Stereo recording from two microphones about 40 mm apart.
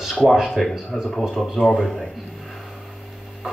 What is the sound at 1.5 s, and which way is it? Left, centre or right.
Speech, centre.